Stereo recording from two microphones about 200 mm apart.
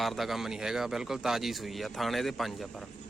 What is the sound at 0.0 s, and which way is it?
A man's voice, centre (ahead or behind).